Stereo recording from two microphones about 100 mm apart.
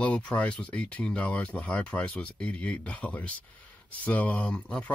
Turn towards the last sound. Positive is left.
turn(degrees=10)  # may be behind; listen again after turning